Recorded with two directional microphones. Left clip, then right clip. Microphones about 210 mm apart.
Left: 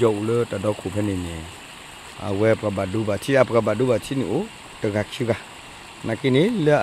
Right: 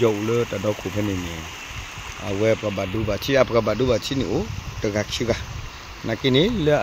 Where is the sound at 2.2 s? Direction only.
10° left (ahead or behind).